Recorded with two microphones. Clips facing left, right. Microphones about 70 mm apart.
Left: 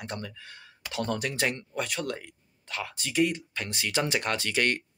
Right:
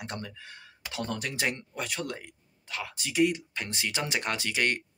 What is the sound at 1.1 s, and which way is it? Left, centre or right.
Speech, centre.